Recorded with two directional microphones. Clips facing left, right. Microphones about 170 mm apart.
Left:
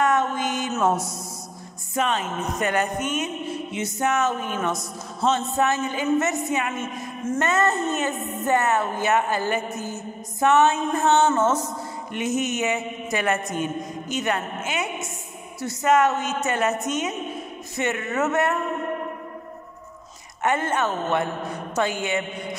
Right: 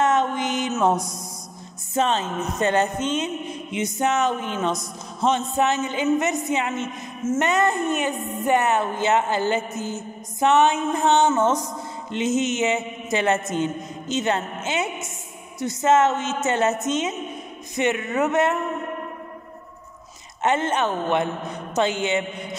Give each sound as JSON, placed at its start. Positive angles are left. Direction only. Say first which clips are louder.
{"t": 0.0, "sound": "mantra", "louder": "right 1 dB", "side_deg": -20}
{"t": 0.9, "sound": "a woman's voice", "louder": "right 1 dB", "side_deg": 5}
{"t": 2.0, "sound": "music", "louder": "right 2 dB", "side_deg": -30}
{"t": 7.3, "sound": "mantra", "louder": "right 1 dB", "side_deg": -15}
{"t": 8.5, "sound": "music", "louder": "right 1 dB", "side_deg": -20}
{"t": 9.8, "sound": "mantra", "louder": "right 2 dB", "side_deg": -20}
{"t": 12.1, "sound": "music", "louder": "right 3 dB", "side_deg": -20}
{"t": 20.4, "sound": "music", "louder": "right 1 dB", "side_deg": -20}